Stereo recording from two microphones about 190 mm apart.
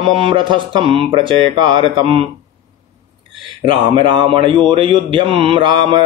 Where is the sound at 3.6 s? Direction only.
25° right (ahead or behind).